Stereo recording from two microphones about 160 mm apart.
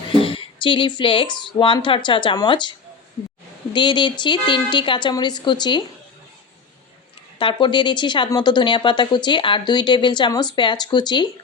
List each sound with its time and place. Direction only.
0.1 s a woman's voice: 35° left (ahead or behind)
7.3 s a woman's voice: 30° left (ahead or behind)